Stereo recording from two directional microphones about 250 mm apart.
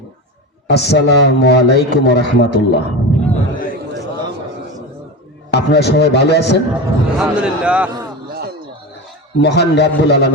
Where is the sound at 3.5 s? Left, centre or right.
Left.